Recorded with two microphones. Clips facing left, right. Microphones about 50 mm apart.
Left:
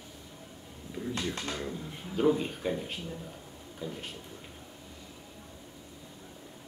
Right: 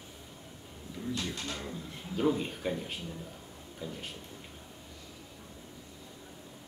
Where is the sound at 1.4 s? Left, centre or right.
Centre.